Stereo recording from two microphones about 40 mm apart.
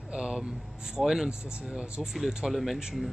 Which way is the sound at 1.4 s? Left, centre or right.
Right.